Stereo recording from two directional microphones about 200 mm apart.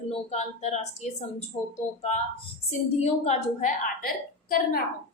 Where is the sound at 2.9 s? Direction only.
30° left (ahead or behind).